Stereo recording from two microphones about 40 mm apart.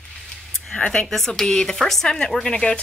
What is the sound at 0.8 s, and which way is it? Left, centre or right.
Speech, left.